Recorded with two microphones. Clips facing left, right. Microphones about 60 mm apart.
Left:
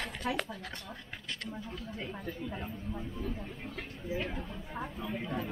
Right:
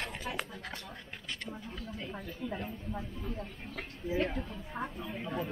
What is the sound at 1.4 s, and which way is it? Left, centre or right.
Speech, centre.